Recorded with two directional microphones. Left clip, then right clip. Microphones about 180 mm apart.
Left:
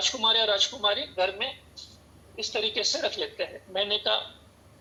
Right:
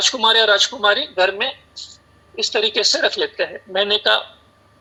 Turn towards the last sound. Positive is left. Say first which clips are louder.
# right 10 dB
turn(degrees=-40)  # may be behind; listen again after turning